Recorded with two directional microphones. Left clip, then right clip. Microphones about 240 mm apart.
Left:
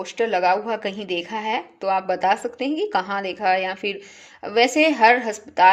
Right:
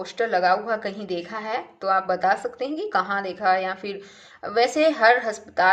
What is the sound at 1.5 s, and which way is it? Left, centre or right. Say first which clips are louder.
A woman's voice: even; left.